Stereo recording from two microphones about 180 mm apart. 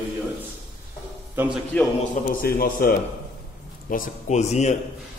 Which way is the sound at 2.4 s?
55° left (ahead or behind).